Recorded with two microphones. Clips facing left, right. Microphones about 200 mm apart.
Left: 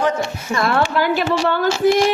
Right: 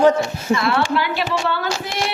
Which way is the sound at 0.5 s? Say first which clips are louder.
Even; 45° left (ahead or behind).